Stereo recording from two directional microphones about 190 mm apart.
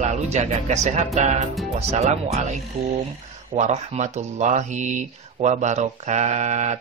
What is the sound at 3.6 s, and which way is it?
Speech, 40° right (ahead or behind).